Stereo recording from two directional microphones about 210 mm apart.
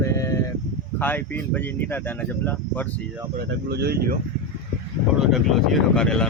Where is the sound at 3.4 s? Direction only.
50° right (ahead or behind).